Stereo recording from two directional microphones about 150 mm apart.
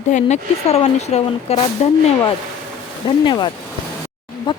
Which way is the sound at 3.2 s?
30° left (ahead or behind).